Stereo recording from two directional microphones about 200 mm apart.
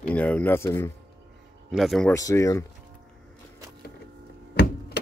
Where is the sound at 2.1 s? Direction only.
15° left (ahead or behind).